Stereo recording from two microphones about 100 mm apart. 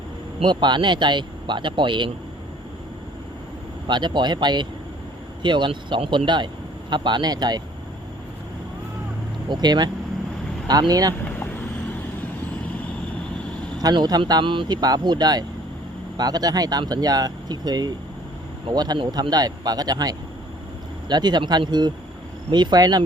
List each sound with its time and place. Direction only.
0.4 s speech: 50° right (ahead or behind)
3.8 s speech: 50° right (ahead or behind)
9.5 s speech: 45° right (ahead or behind)
13.7 s speech: 45° right (ahead or behind)
18.9 s speech: 55° right (ahead or behind)
19.3 s speech: 40° right (ahead or behind)